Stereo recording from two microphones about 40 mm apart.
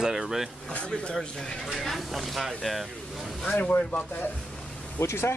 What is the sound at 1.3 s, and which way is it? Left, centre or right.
Speech, centre.